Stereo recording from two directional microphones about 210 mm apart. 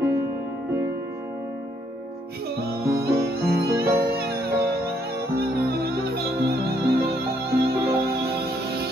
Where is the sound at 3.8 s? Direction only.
15° right (ahead or behind).